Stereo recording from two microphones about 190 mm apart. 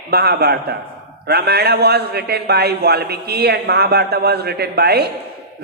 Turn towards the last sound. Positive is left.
turn(degrees=-55)  # may be behind; listen again after turning